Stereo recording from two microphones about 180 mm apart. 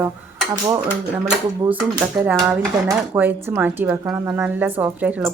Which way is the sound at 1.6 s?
10° right (ahead or behind).